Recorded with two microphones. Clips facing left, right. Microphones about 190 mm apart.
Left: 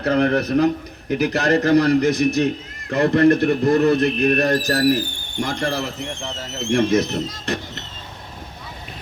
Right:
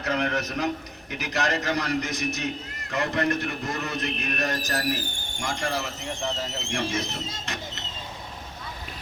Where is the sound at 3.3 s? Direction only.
55° left (ahead or behind).